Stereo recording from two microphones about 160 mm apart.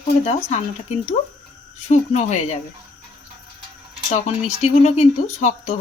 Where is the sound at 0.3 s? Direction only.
45° left (ahead or behind).